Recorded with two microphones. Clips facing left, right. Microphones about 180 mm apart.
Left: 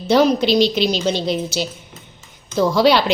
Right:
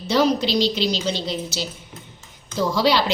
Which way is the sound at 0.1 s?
60° left (ahead or behind).